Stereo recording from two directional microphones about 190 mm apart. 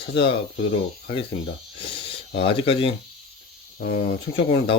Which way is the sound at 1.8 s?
30° left (ahead or behind).